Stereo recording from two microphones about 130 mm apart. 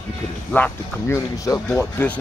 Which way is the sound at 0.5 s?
15° left (ahead or behind).